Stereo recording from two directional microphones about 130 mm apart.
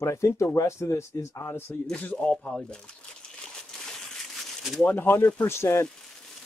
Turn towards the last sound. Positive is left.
turn(degrees=20)  # may be behind; listen again after turning